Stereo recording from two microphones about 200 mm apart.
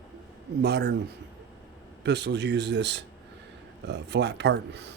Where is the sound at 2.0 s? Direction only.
55° right (ahead or behind).